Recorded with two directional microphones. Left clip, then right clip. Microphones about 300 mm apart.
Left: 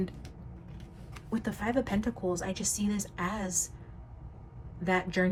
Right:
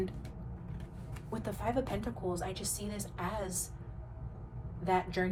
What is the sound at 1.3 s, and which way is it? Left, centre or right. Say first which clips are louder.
Speech: left 3 dB; left.